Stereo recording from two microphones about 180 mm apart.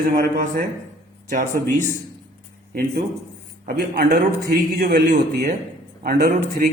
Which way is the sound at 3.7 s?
60° right (ahead or behind).